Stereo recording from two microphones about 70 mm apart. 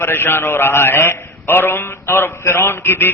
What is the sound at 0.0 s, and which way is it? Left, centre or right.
A man's voice, left.